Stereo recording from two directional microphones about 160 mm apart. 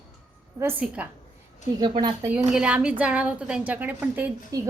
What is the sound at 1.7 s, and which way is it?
Speech, 30° right (ahead or behind).